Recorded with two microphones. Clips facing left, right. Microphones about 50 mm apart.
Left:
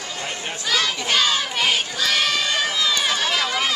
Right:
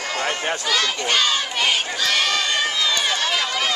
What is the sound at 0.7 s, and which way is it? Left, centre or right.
Crowd, centre.